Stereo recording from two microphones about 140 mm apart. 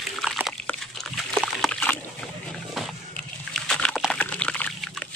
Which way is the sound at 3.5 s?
5° left (ahead or behind).